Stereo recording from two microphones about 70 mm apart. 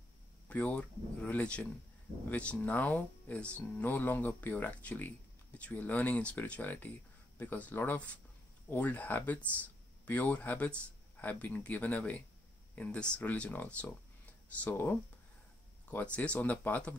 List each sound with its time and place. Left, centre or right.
0.5 s speech: centre
15.9 s speech: left